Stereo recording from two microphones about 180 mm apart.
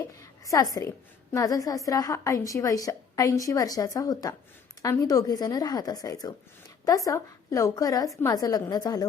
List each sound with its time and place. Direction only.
0.2 s a woman's voice: 20° left (ahead or behind)